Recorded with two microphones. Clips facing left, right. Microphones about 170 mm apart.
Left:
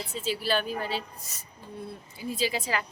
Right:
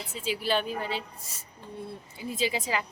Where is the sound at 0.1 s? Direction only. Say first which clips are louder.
Even; 15° right (ahead or behind).